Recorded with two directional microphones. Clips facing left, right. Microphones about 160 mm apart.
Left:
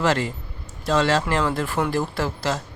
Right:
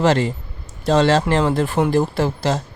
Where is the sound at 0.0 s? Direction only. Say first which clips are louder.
Right 5 dB; 25° right (ahead or behind).